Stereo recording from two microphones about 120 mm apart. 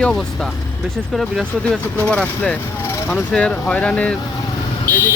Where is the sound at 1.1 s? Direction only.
Centre (ahead or behind).